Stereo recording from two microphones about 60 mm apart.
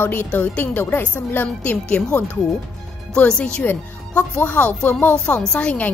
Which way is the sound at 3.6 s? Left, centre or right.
Left.